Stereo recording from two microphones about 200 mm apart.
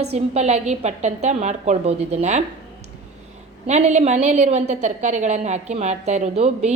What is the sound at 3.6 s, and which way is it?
A woman's voice, 35° right (ahead or behind).